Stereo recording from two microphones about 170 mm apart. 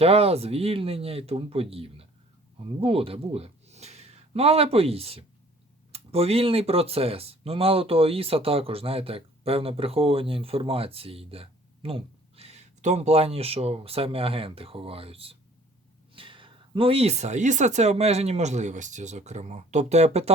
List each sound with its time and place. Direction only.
0.0 s speech: 35° right (ahead or behind)